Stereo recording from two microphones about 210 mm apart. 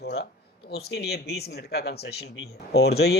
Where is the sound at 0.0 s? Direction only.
50° left (ahead or behind).